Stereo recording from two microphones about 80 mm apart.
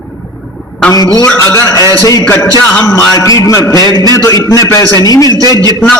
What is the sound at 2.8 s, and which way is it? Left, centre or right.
A man's voice, left.